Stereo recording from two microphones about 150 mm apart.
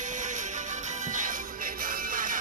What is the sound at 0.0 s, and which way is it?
Music, 55° right (ahead or behind).